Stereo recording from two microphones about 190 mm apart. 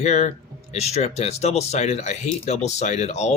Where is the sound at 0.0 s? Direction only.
35° left (ahead or behind).